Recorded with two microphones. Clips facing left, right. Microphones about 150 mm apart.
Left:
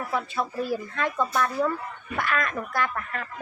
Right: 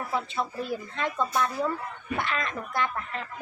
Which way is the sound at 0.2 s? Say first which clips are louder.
Left 2 dB; 20° right (ahead or behind).